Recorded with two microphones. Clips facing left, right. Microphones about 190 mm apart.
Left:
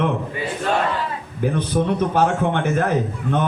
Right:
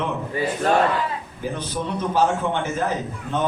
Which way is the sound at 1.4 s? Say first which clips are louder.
Left 8 dB; 60° left (ahead or behind).